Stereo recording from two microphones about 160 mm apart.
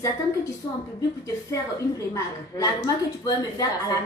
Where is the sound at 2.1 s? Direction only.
20° left (ahead or behind).